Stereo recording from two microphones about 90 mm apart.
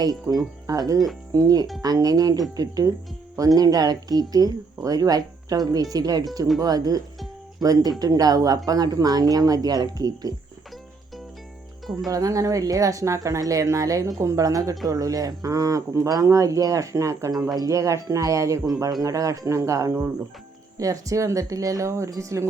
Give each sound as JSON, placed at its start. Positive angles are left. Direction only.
{"t": 0.0, "sound": "speech", "side_deg": -45}
{"t": 12.0, "sound": "speech", "side_deg": -40}